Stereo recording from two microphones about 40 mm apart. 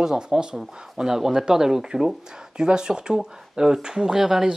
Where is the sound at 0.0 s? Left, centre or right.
Centre.